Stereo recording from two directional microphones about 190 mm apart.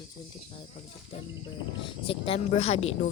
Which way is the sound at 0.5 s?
30° left (ahead or behind).